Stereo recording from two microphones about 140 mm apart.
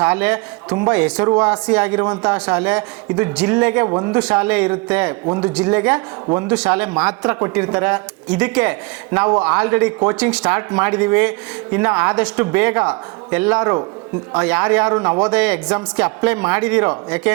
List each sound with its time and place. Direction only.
0.0 s speech: 10° right (ahead or behind)
3.8 s speech: 25° right (ahead or behind)
4.1 s speech: 10° right (ahead or behind)